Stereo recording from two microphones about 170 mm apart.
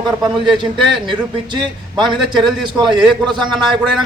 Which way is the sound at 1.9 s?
25° right (ahead or behind).